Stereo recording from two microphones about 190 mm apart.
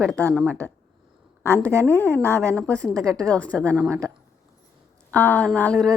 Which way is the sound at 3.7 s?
15° right (ahead or behind).